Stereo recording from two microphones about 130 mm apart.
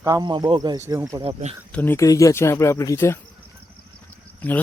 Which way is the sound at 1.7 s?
15° left (ahead or behind).